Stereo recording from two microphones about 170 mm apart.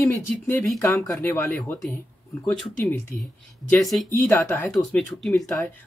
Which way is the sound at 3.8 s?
Centre (ahead or behind).